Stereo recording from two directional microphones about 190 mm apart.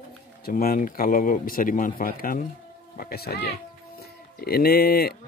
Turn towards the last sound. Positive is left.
turn(degrees=55)  # may be behind; listen again after turning